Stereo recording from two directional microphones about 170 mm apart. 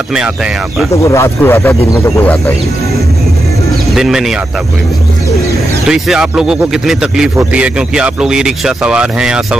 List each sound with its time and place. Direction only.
0.9 s speech: 15° left (ahead or behind)
3.9 s speech: centre (ahead or behind)
5.9 s speech: centre (ahead or behind)